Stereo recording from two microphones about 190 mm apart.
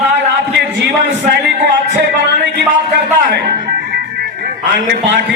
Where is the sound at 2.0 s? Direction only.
65° right (ahead or behind).